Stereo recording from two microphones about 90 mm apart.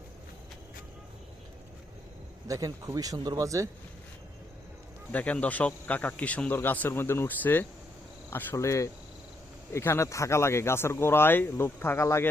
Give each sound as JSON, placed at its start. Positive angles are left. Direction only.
{"t": 2.5, "sound": "speech", "side_deg": -40}
{"t": 5.1, "sound": "speech", "side_deg": 15}
{"t": 8.5, "sound": "speech", "side_deg": 35}